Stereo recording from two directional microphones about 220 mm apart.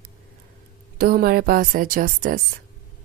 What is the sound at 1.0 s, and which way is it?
A woman's voice, 45° right (ahead or behind).